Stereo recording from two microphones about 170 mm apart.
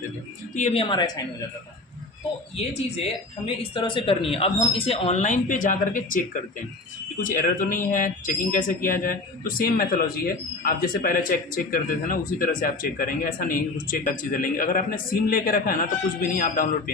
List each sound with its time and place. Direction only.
0.5 s speech: 40° left (ahead or behind); by 1.2 s 25° left (ahead or behind)
3.4 s speech: 30° left (ahead or behind); by 16.9 s 55° left (ahead or behind)